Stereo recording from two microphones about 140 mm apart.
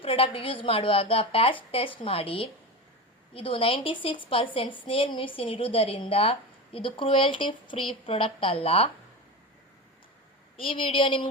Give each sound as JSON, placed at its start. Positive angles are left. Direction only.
{"t": 0.0, "sound": "a woman's voice", "side_deg": 40}
{"t": 10.6, "sound": "a woman's voice", "side_deg": 40}